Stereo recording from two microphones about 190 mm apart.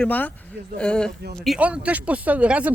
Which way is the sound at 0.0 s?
10° left (ahead or behind).